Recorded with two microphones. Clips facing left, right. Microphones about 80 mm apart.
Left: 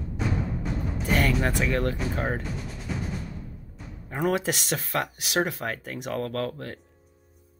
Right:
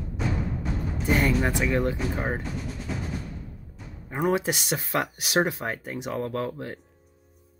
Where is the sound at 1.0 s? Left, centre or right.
Centre.